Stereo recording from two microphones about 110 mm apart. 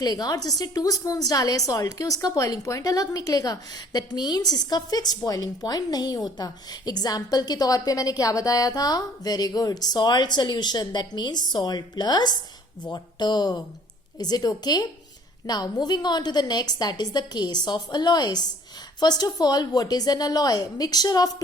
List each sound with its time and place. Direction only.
0.0 s a woman's voice: 35° left (ahead or behind)